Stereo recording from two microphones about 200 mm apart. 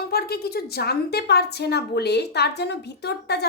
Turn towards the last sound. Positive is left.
turn(degrees=55)  # may be behind; listen again after turning